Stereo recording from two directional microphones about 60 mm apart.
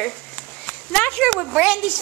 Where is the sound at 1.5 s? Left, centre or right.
Right.